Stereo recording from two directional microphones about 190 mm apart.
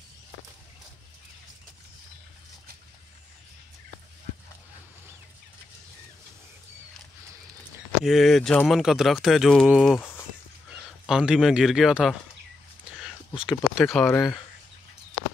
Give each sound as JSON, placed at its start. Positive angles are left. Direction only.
{"t": 8.0, "sound": "speech", "side_deg": 0}
{"t": 9.9, "sound": "a sound", "side_deg": 15}
{"t": 11.1, "sound": "speech", "side_deg": -5}
{"t": 13.3, "sound": "speech", "side_deg": 25}
{"t": 13.7, "sound": "speech", "side_deg": 0}
{"t": 14.1, "sound": "speech", "side_deg": 20}